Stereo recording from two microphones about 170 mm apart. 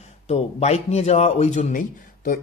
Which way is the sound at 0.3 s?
40° left (ahead or behind).